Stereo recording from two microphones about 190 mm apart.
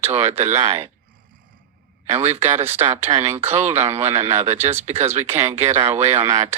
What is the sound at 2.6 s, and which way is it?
Speech, 35° right (ahead or behind).